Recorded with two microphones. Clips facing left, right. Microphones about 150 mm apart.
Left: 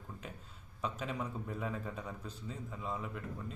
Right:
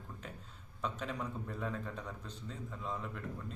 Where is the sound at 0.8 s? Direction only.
5° left (ahead or behind).